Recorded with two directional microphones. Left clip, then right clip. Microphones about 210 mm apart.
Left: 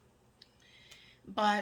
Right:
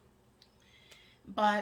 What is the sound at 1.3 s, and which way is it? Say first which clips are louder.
Speech: right 1 dB; 30° left (ahead or behind).